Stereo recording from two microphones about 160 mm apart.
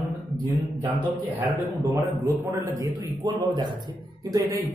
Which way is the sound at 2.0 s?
20° right (ahead or behind).